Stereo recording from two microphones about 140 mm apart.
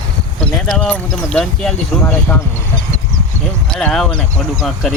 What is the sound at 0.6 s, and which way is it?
Speech, 5° left (ahead or behind).